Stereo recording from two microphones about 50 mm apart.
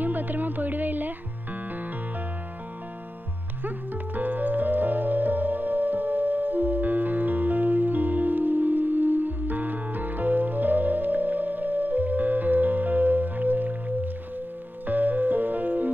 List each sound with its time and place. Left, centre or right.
0.0 s music: right
3.6 s music: right